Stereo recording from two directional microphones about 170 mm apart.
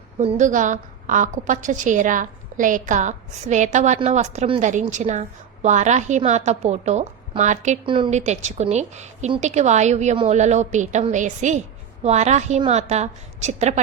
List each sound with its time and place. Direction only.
0.2 s a woman's voice: 40° right (ahead or behind)
7.9 s a woman's voice: 30° right (ahead or behind)
8.1 s a woman's voice: 40° right (ahead or behind)